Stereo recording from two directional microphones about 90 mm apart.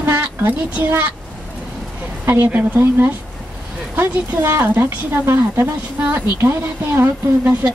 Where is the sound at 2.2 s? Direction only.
25° right (ahead or behind).